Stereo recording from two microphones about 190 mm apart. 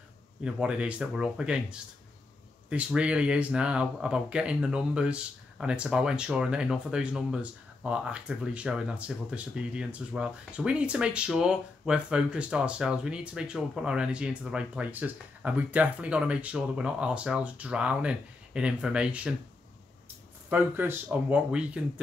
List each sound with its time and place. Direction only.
0.4 s speech: 5° right (ahead or behind)
20.4 s speech: 10° right (ahead or behind)